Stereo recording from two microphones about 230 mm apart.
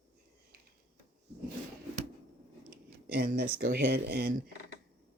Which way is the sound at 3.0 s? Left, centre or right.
Right.